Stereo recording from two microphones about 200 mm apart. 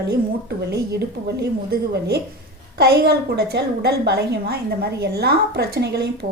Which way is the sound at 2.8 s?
55° right (ahead or behind).